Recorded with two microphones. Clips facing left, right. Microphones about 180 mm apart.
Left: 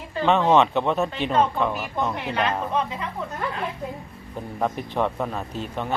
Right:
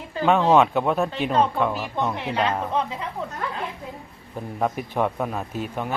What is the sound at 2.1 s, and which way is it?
Speech, 25° right (ahead or behind).